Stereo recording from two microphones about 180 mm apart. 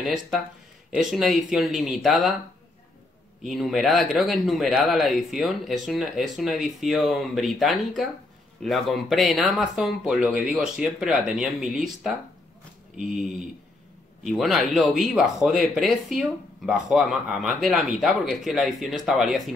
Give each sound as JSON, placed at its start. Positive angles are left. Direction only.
{"t": 0.0, "sound": "speech", "side_deg": 0}
{"t": 3.4, "sound": "speech", "side_deg": 0}
{"t": 13.1, "sound": "speech", "side_deg": 0}